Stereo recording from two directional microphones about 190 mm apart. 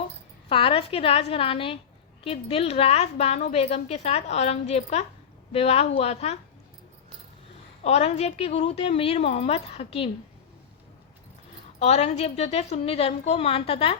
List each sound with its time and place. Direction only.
0.4 s a woman's voice: 30° left (ahead or behind)
7.9 s a woman's voice: 35° left (ahead or behind)
11.8 s a woman's voice: 35° left (ahead or behind)